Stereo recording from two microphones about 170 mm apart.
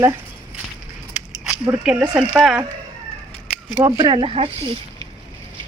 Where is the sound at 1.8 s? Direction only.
5° right (ahead or behind).